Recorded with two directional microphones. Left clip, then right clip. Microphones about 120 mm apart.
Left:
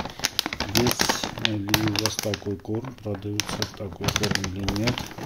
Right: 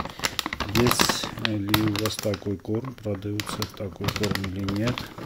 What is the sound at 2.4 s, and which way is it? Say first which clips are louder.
Speech: right 1 dB; 35° right (ahead or behind).